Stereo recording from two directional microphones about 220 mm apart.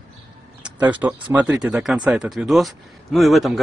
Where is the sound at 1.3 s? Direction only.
5° right (ahead or behind).